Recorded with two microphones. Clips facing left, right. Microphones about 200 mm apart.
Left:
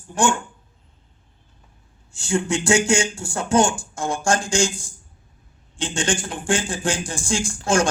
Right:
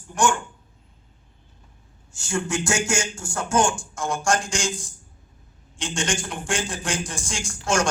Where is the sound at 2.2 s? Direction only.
30° left (ahead or behind).